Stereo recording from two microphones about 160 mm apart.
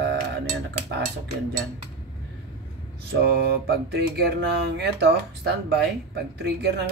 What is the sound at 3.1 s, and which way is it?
Music, 90° right.